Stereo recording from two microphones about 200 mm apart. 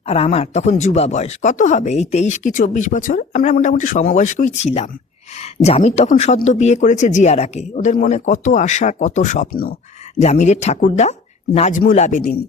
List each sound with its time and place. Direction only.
0.1 s speech: 30° left (ahead or behind); by 9.7 s 45° left (ahead or behind)
10.2 s speech: 35° left (ahead or behind)